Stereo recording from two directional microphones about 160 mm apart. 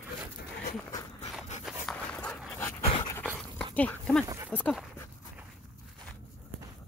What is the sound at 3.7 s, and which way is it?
Speech, 5° left (ahead or behind).